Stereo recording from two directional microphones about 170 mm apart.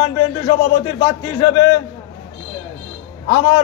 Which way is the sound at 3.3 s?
20° left (ahead or behind).